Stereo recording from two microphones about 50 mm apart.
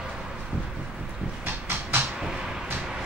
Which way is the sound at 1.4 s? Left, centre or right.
Right.